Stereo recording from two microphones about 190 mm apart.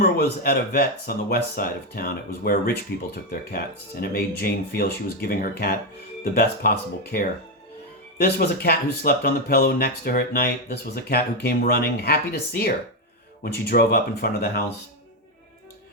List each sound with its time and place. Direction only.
0.0 s speech: 55° left (ahead or behind)